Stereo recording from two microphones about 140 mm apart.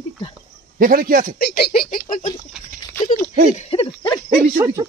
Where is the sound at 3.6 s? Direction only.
40° left (ahead or behind).